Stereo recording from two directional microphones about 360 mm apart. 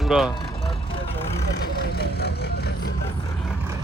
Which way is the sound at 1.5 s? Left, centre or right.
Left.